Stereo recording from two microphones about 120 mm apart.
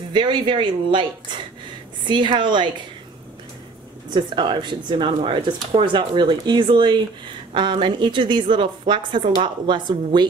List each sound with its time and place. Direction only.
0.1 s speech: 40° right (ahead or behind)
4.1 s speech: 40° right (ahead or behind)